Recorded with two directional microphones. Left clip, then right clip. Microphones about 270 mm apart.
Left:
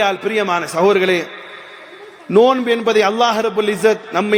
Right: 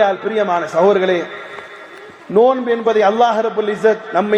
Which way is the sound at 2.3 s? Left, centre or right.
Left.